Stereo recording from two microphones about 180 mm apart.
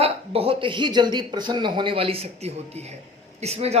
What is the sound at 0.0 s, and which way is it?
Speech, 30° right (ahead or behind).